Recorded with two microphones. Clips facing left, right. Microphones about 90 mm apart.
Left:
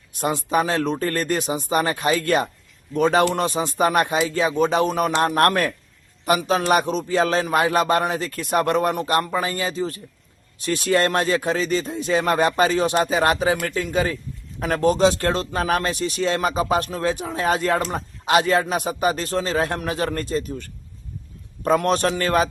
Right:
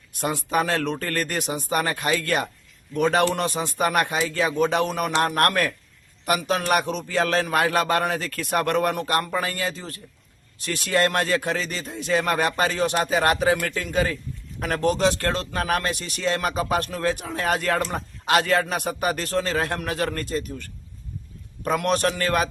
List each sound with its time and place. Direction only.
0.2 s a man's voice: 25° left (ahead or behind)